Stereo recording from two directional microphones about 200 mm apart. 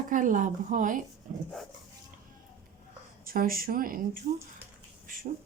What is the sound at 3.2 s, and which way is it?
Speech, 45° right (ahead or behind).